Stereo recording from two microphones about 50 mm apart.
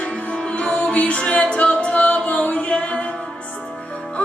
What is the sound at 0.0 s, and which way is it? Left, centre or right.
Music, centre.